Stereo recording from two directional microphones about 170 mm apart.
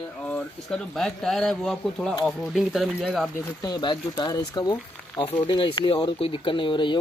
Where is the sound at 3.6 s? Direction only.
25° left (ahead or behind).